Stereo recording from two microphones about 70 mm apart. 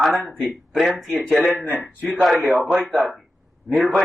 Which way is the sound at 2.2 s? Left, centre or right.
Centre.